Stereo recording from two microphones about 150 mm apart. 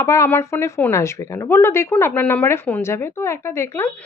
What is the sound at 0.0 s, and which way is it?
A woman's voice, 15° left (ahead or behind).